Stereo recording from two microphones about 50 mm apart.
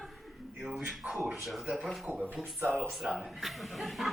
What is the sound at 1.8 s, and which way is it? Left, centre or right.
A man's voice, centre.